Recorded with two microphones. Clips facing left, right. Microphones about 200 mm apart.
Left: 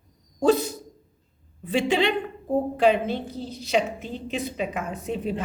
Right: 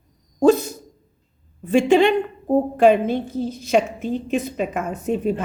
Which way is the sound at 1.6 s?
50° right (ahead or behind).